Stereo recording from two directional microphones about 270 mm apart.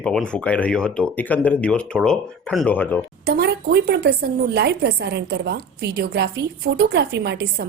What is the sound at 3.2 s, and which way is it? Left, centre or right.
A woman's voice, right.